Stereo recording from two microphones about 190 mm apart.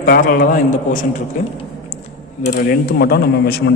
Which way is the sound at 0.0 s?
50° left (ahead or behind).